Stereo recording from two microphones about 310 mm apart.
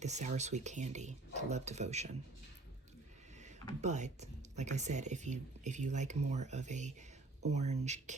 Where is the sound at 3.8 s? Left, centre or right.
Right.